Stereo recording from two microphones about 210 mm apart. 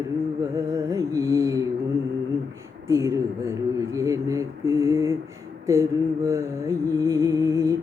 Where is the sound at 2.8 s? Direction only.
15° right (ahead or behind).